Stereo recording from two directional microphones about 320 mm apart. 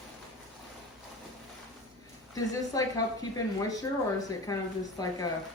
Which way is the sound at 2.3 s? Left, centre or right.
Centre.